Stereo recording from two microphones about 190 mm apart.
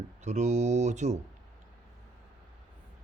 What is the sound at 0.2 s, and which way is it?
Speech, 40° right (ahead or behind).